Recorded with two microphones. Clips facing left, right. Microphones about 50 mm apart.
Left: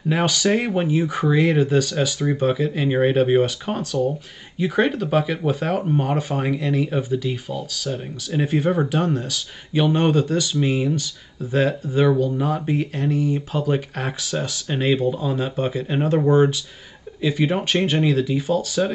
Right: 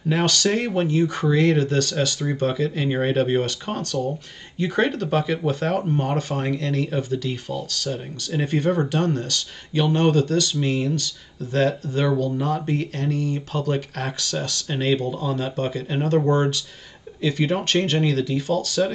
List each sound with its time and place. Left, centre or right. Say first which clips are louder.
0.1 s speech: left 1 dB; centre